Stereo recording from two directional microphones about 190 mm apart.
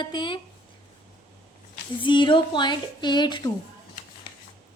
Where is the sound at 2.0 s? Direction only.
25° left (ahead or behind).